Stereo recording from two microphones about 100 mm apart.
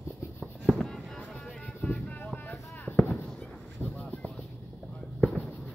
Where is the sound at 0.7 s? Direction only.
5° left (ahead or behind).